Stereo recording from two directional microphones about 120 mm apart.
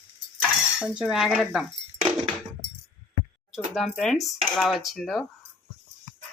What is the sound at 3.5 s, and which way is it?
Speech, centre (ahead or behind).